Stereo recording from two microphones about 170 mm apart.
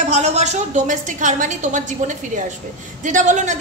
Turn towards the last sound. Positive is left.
turn(degrees=-45)  # may be behind; listen again after turning